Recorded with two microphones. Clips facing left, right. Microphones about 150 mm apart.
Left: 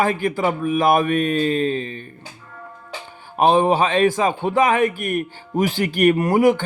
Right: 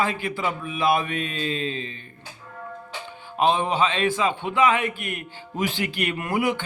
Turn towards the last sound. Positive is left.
turn(degrees=40)  # may be behind; listen again after turning